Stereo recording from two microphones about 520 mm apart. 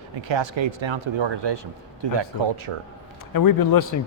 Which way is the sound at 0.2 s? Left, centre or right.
Right.